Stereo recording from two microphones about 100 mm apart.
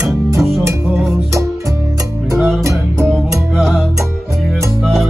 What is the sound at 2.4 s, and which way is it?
Music, centre (ahead or behind).